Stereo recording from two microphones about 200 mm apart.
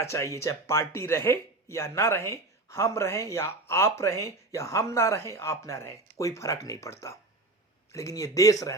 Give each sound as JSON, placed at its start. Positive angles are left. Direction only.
{"t": 0.0, "sound": "speech", "side_deg": 15}